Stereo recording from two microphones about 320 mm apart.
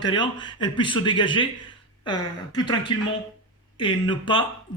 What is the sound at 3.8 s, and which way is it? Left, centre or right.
Speech, centre.